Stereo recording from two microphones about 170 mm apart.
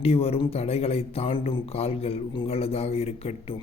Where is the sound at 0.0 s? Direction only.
35° left (ahead or behind).